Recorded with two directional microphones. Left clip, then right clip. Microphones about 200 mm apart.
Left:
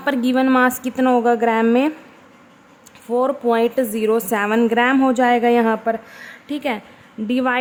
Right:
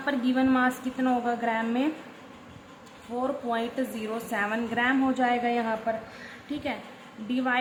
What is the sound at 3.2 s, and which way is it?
A woman's voice, 55° left (ahead or behind).